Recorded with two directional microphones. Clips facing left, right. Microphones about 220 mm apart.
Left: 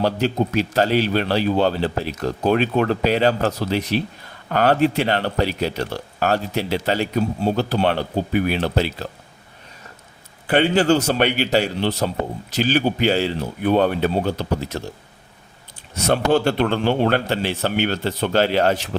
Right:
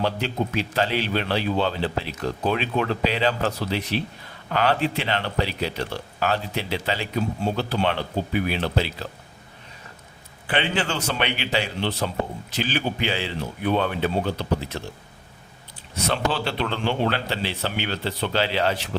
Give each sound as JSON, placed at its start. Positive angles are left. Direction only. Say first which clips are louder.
{"t": 0.0, "sound": "speech", "louder": "left 5 dB", "side_deg": 40}
{"t": 10.4, "sound": "speech", "louder": "left 8 dB", "side_deg": 45}
{"t": 16.0, "sound": "speech", "louder": "left 7 dB", "side_deg": 45}